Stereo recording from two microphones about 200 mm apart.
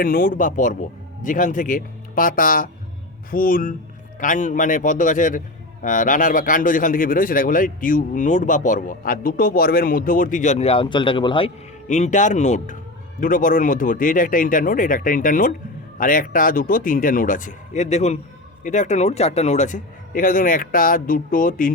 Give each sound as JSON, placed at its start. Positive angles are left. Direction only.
{"t": 0.0, "sound": "a man's voice", "side_deg": 45}